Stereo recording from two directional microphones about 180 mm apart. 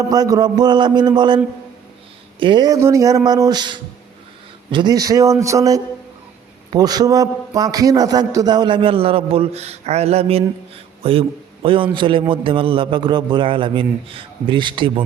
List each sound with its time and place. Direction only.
0.1 s a man's voice: 20° right (ahead or behind)
2.4 s a man's voice: 25° right (ahead or behind)